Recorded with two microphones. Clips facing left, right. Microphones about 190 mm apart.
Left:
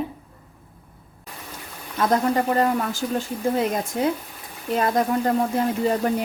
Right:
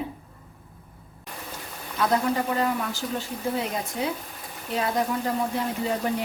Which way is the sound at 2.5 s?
45° left (ahead or behind).